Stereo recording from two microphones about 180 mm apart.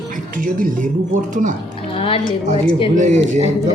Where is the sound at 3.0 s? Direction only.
40° right (ahead or behind).